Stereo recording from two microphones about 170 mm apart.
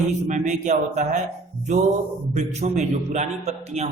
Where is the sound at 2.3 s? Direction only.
45° right (ahead or behind).